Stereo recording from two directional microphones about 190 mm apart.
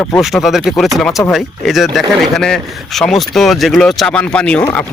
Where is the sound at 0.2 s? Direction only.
Centre (ahead or behind).